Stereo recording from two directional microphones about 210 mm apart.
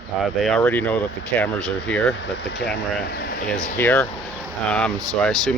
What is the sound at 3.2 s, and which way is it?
Speech, 55° left (ahead or behind).